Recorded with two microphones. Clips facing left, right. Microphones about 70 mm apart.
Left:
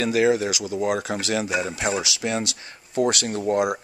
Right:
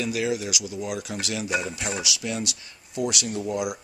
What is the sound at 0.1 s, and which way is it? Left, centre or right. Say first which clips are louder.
Speech: left 7 dB; left.